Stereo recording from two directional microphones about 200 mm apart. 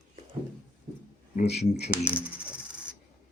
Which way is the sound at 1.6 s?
30° left (ahead or behind).